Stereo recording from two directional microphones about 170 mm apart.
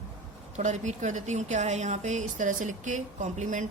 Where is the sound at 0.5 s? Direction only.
45° right (ahead or behind).